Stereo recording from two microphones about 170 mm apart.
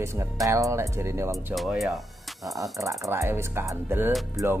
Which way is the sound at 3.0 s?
15° right (ahead or behind).